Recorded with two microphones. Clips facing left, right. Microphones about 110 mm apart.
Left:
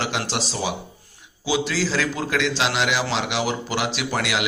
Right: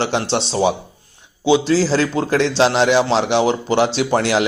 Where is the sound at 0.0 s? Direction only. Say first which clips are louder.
Right 7 dB; 30° right (ahead or behind).